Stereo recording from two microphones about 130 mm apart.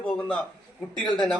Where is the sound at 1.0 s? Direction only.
5° left (ahead or behind).